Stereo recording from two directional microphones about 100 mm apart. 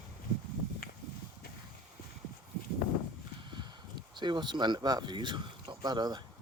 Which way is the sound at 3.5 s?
50° right (ahead or behind).